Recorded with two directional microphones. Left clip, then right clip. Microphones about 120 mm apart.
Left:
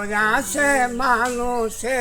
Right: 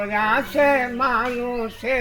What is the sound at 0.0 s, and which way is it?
Speech, 25° left (ahead or behind).